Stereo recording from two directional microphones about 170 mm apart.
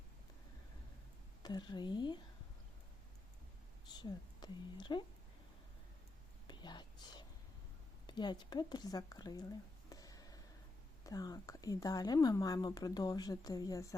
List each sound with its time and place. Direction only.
1.4 s a woman's voice: 25° left (ahead or behind)
3.8 s a woman's voice: 25° left (ahead or behind)
6.5 s whispering: 25° left (ahead or behind)
8.0 s speech: 25° left (ahead or behind)